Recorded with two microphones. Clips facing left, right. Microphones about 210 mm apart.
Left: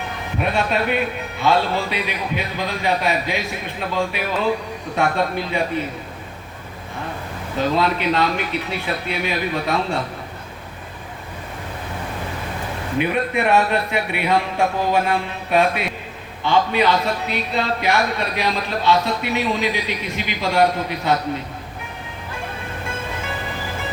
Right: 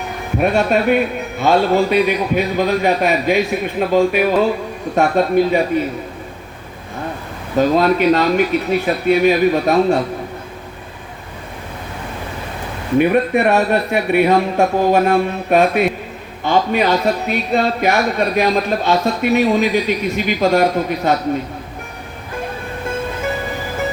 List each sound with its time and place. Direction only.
0.3 s a man's voice: 50° right (ahead or behind)
7.8 s a man's voice: 45° right (ahead or behind)
13.0 s a man's voice: 45° right (ahead or behind)